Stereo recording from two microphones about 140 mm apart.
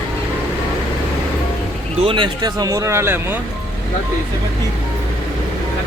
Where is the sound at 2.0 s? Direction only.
35° right (ahead or behind); by 3.3 s 15° right (ahead or behind).